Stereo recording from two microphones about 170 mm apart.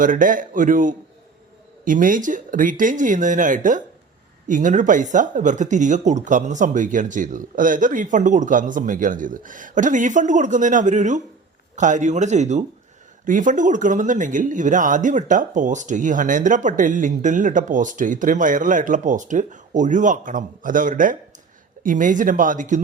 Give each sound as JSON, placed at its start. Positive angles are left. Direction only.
{"t": 0.0, "sound": "speech", "side_deg": -50}